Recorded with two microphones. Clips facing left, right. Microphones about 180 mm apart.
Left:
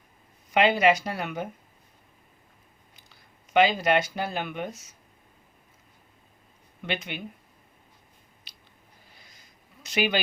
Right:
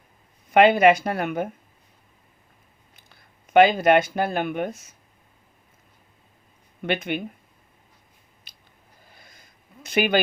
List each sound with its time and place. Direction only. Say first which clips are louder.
0.5 s speech: right 6 dB; 55° right (ahead or behind)
2.9 s speech: right 3 dB; 55° right (ahead or behind)
6.8 s speech: right 7 dB; 55° right (ahead or behind)
8.5 s a sound: right 2 dB; 45° right (ahead or behind)